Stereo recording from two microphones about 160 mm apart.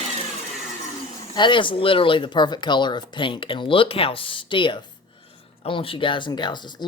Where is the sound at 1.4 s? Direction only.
30° left (ahead or behind).